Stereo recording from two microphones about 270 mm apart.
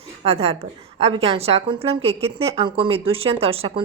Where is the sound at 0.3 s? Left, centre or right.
Right.